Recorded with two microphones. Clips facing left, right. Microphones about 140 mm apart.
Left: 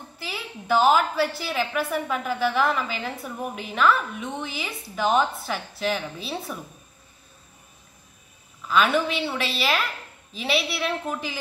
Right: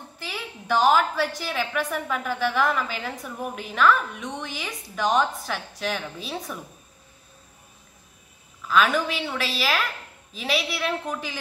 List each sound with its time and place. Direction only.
0.2 s a woman's voice: 5° left (ahead or behind)
8.6 s a woman's voice: centre (ahead or behind)